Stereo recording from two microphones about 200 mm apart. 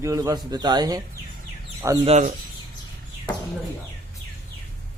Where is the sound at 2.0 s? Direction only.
35° right (ahead or behind).